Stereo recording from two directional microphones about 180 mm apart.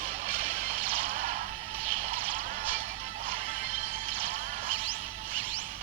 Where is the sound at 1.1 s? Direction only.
35° right (ahead or behind).